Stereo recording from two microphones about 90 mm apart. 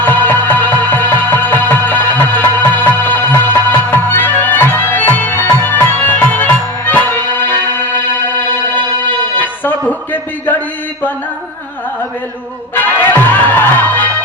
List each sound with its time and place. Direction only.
0.0 s music: 20° left (ahead or behind)
12.7 s music: 20° left (ahead or behind)